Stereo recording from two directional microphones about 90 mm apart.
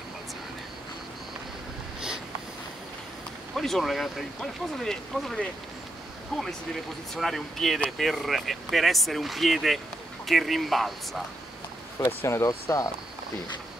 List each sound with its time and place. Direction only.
3.5 s speech: centre (ahead or behind)
12.2 s speech: 30° left (ahead or behind)
12.4 s speech: 45° left (ahead or behind)